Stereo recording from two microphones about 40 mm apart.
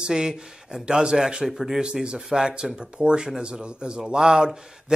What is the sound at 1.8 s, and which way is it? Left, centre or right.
Speech, right.